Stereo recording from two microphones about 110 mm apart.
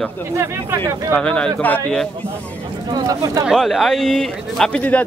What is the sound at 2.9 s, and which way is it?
Speech, 35° right (ahead or behind).